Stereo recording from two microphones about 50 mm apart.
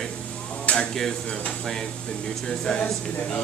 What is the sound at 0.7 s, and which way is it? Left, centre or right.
Speech, centre.